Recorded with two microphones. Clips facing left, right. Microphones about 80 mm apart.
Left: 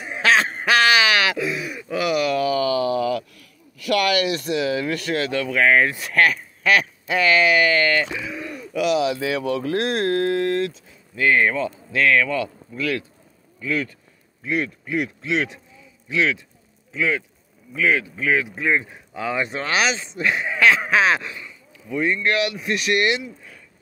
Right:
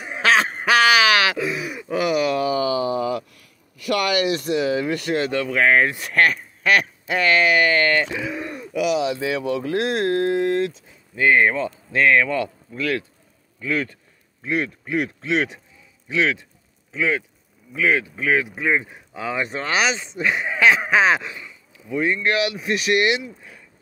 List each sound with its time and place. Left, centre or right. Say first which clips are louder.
1.4 s a sound: even; centre
1.9 s a sound: right 1 dB; right
3.8 s speech: left 1 dB; right; by 7.7 s centre
7.9 s speech: right 1 dB; centre
8.3 s bird: right 2 dB; right
8.7 s speech: left 1 dB; centre
9.4 s speech: even; centre
9.8 s speech: right 2 dB; left
10.1 s speech: right 1 dB; centre
13.7 s a man's voice: right 1 dB; right
15.2 s speech: right 1 dB; centre